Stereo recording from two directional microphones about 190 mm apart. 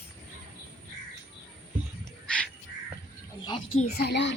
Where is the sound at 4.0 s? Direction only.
65° left (ahead or behind).